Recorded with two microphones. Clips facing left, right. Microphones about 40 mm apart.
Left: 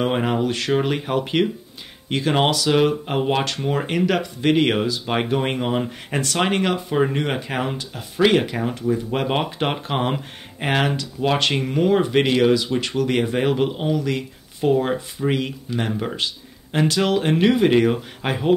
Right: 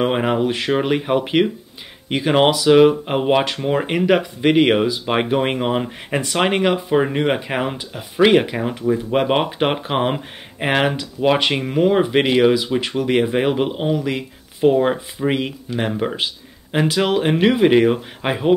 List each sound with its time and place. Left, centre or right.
0.0 s speech: centre